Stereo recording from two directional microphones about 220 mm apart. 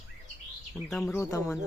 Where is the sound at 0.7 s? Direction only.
Centre (ahead or behind).